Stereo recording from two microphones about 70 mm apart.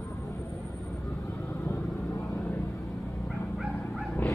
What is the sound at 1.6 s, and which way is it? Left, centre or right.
Vehicle, left.